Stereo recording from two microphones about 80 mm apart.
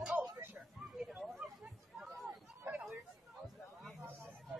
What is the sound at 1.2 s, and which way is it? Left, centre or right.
Chatter, centre.